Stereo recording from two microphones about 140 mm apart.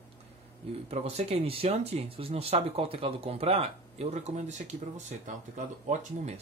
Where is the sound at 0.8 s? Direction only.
50° right (ahead or behind).